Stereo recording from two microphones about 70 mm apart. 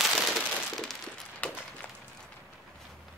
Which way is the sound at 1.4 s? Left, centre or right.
Centre.